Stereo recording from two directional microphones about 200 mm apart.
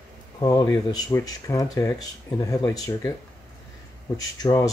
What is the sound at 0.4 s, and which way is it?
Speech, 20° left (ahead or behind).